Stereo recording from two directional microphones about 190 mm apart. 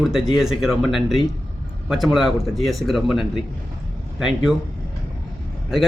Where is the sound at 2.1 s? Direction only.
Centre (ahead or behind).